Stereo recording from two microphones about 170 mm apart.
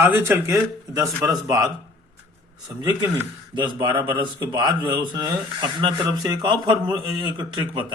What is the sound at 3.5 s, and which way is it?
A man's voice, 25° right (ahead or behind).